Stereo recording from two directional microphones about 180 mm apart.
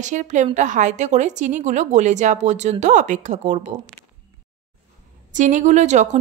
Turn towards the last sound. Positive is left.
turn(degrees=-40)  # may be behind; listen again after turning